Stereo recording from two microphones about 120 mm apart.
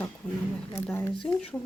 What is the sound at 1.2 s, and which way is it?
Speech, 5° left (ahead or behind).